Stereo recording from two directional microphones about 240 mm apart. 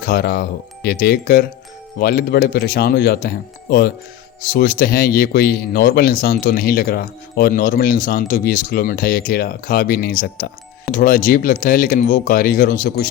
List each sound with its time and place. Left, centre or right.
0.0 s speech: left